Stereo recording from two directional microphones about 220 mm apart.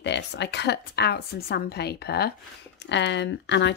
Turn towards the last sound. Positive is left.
turn(degrees=50)  # may be behind; listen again after turning